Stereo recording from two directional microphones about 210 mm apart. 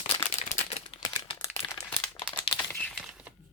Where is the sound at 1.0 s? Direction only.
20° left (ahead or behind).